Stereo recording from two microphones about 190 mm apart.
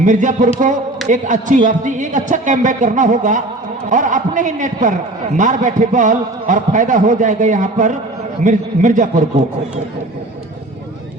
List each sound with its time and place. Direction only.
0.0 s a man's voice: 40° right (ahead or behind)